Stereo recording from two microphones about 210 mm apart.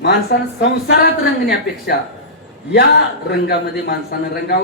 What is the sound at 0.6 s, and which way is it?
A man's voice, 50° left (ahead or behind).